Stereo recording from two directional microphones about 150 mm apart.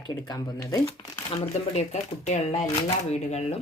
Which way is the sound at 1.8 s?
50° left (ahead or behind).